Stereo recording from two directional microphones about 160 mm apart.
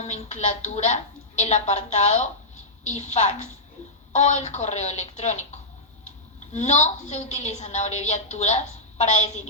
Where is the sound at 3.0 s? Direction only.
50° left (ahead or behind).